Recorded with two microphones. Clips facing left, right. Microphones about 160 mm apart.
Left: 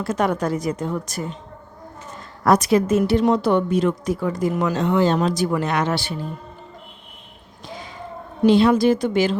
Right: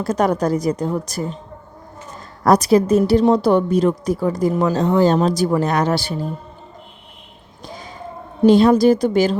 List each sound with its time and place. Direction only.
0.0 s a woman's voice: 40° right (ahead or behind)
2.4 s a woman's voice: 35° right (ahead or behind)
7.7 s a sound: 40° right (ahead or behind)
8.4 s a woman's voice: 40° right (ahead or behind)